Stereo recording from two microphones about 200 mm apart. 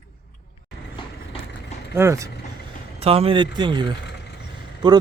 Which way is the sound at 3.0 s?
30° right (ahead or behind).